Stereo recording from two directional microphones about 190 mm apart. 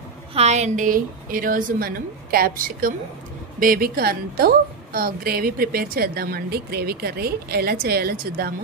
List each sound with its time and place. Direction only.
0.3 s a woman's voice: 35° right (ahead or behind); by 8.5 s 55° right (ahead or behind)